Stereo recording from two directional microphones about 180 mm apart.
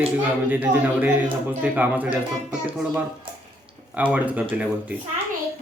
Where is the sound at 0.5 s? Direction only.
10° right (ahead or behind).